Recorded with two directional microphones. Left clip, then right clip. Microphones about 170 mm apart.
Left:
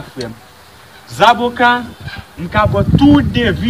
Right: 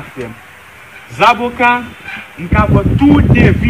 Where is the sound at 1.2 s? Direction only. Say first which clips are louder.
Even; 15° left (ahead or behind).